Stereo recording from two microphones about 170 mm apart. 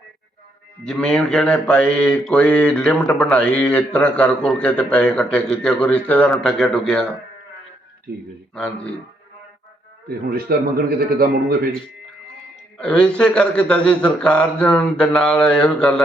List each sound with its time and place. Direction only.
0.9 s mantra: 5° left (ahead or behind)
8.5 s mantra: 5° left (ahead or behind)
10.1 s a man's voice: 65° right (ahead or behind)
12.8 s a man's voice: 5° left (ahead or behind)